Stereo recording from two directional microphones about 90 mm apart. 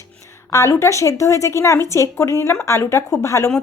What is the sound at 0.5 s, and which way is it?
Speech, 30° left (ahead or behind).